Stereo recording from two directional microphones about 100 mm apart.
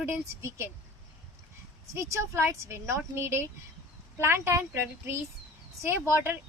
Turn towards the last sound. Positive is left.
turn(degrees=-25)  # may be behind; listen again after turning